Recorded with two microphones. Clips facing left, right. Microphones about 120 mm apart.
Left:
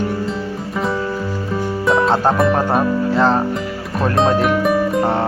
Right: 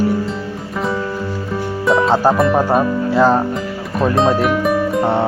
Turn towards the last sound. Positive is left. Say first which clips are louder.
# right 1 dB
turn(degrees=0)  # may be behind; listen again after turning